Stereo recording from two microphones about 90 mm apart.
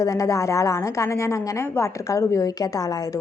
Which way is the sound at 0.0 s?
40° left (ahead or behind).